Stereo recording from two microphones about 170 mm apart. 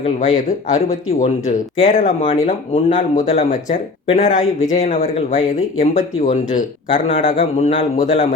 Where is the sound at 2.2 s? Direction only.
35° left (ahead or behind).